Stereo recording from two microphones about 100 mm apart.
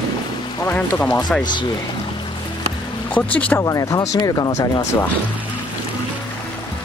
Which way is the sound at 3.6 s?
35° left (ahead or behind).